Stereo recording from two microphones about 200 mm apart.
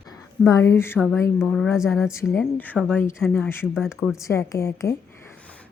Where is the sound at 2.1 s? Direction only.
15° left (ahead or behind).